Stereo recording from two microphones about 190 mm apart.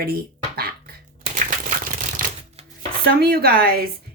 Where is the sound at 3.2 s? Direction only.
55° right (ahead or behind).